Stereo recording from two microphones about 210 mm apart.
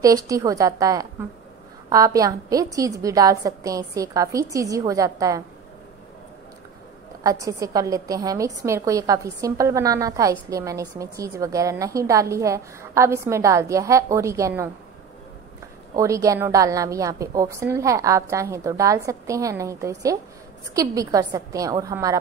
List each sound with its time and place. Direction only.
0.0 s a woman's voice: 15° right (ahead or behind)
7.2 s a woman's voice: 15° right (ahead or behind)
15.9 s a woman's voice: 15° right (ahead or behind)